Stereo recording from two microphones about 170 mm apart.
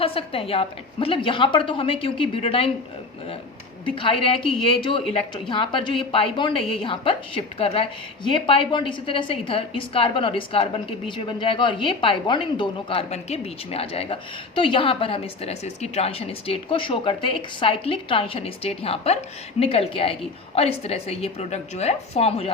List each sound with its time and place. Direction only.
0.0 s speech: 35° left (ahead or behind)
3.8 s speech: 30° left (ahead or behind)